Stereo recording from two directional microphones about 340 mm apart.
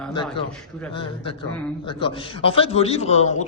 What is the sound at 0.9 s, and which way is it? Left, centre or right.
A man's voice, centre.